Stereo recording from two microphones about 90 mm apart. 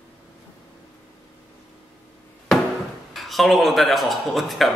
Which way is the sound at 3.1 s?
Centre (ahead or behind).